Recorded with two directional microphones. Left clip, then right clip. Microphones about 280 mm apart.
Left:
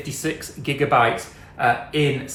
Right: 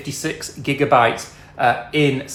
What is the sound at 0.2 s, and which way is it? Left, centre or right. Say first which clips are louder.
Speech: even; right.